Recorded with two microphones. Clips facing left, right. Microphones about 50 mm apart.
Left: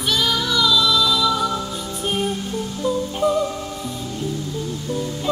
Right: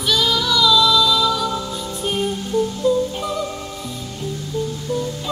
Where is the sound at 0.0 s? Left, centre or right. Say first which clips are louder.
Right 2 dB; left.